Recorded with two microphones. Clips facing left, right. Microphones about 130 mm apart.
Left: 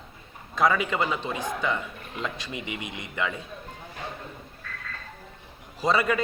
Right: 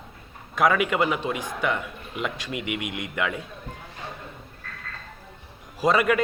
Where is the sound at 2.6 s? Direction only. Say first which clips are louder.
Right 5 dB; 90° right.